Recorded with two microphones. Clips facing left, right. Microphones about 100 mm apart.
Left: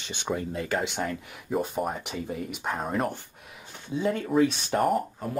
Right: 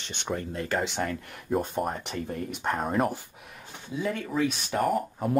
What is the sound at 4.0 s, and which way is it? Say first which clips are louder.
Speech: left 4 dB; 35° left (ahead or behind).